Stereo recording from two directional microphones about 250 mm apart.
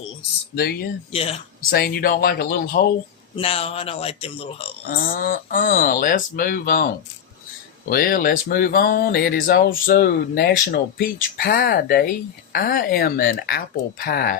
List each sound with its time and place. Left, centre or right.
1.1 s speech: left
1.7 s speech: left
3.3 s speech: left
4.9 s speech: left
7.9 s speech: left